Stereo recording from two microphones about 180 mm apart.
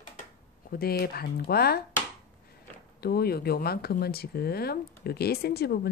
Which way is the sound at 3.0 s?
60° left (ahead or behind).